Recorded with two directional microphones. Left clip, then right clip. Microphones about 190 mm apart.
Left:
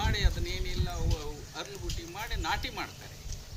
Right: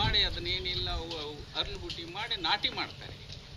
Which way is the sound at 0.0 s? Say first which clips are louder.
Right 5 dB; 15° left (ahead or behind).